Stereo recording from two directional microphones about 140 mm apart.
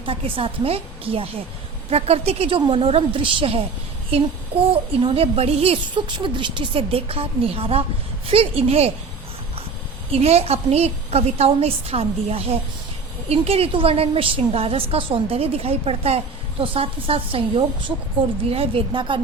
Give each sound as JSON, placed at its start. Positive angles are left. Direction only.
{"t": 0.0, "sound": "a woman's voice", "side_deg": -40}
{"t": 10.1, "sound": "a woman's voice", "side_deg": -45}